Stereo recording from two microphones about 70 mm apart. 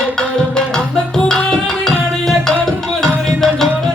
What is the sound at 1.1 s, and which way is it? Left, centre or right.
Tabla, centre.